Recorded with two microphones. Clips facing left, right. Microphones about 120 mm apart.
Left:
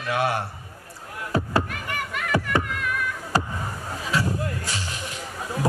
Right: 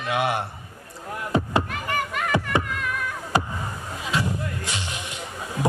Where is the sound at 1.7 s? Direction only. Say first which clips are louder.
Right 4 dB; 35° right (ahead or behind).